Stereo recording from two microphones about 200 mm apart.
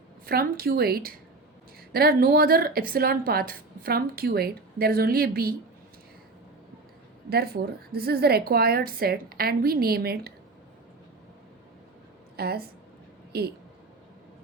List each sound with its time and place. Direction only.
0.3 s a woman's voice: 50° right (ahead or behind)
7.3 s a woman's voice: 50° right (ahead or behind)
12.4 s a woman's voice: 50° right (ahead or behind)